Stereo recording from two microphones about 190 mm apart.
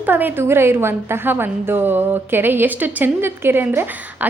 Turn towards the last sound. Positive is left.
turn(degrees=-10)  # may be behind; listen again after turning